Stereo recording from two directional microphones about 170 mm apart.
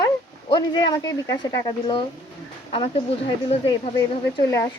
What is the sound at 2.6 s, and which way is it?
Speech, 35° left (ahead or behind).